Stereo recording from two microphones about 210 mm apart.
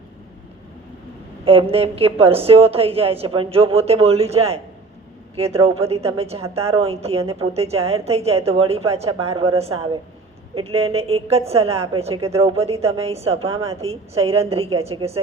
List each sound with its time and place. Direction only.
1.5 s a woman's voice: 25° right (ahead or behind)